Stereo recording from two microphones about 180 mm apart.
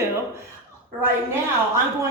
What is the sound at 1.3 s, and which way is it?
Speech, 15° right (ahead or behind).